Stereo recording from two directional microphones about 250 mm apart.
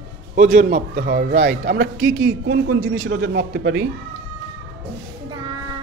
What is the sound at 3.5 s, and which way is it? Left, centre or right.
Speech, right.